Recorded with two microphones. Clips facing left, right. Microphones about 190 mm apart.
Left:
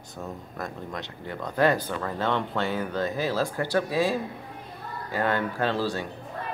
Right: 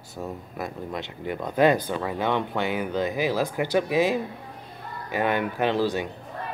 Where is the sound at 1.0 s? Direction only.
20° right (ahead or behind).